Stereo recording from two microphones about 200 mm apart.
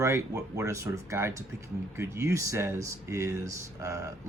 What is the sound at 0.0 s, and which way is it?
Speech, 15° right (ahead or behind).